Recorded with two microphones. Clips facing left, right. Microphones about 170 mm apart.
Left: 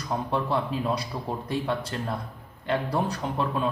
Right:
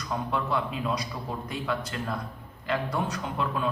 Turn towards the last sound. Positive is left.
turn(degrees=30)  # may be behind; listen again after turning